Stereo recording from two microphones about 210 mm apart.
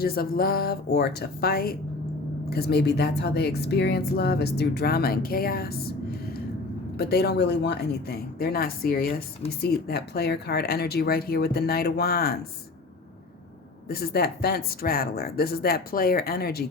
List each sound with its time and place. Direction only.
0.0 s speech: 45° left (ahead or behind)
6.9 s speech: 50° left (ahead or behind)
13.8 s speech: 50° left (ahead or behind)